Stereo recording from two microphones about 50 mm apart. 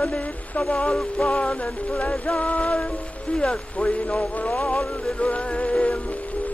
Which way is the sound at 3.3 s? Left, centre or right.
Centre.